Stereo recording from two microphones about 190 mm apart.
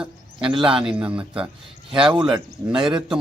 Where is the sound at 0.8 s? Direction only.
5° right (ahead or behind).